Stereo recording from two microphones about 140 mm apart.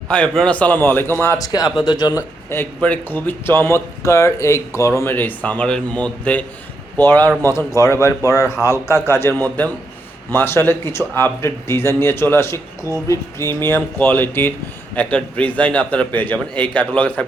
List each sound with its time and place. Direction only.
0.1 s speech: 5° left (ahead or behind); by 2.2 s 30° left (ahead or behind)
2.5 s speech: 15° left (ahead or behind)